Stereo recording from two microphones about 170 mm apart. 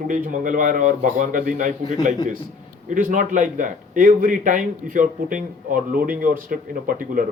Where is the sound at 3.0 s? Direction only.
50° right (ahead or behind).